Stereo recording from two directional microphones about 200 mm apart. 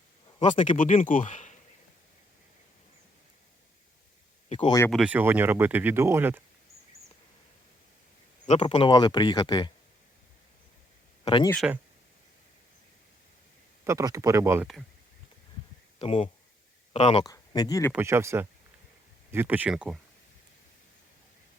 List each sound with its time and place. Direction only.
0.3 s speech: 25° left (ahead or behind)
0.6 s speech: 40° left (ahead or behind)
4.4 s a sound: 25° left (ahead or behind)
4.9 s speech: 5° right (ahead or behind)
8.4 s speech: 30° left (ahead or behind)
11.3 s speech: 25° left (ahead or behind)
13.8 s speech: 15° right (ahead or behind)
16.0 s speech: 30° left (ahead or behind)
17.2 s speech: 20° left (ahead or behind)
17.9 s speech: 15° right (ahead or behind)